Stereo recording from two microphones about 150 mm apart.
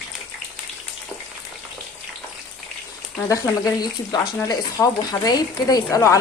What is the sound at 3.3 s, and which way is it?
Speech, 25° left (ahead or behind).